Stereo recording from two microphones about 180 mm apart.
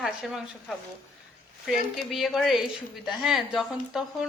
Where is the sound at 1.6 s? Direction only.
Centre (ahead or behind).